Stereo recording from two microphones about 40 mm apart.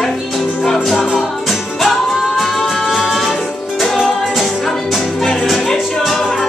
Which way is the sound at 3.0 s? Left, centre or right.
Centre.